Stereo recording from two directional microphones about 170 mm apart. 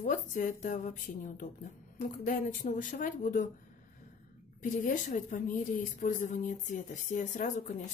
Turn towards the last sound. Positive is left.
turn(degrees=45)  # may be behind; listen again after turning